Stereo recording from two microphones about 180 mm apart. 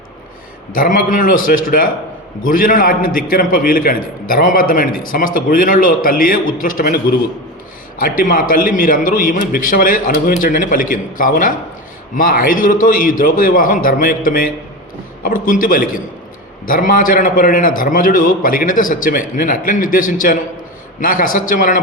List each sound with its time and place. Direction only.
0.7 s a man's voice: 50° left (ahead or behind)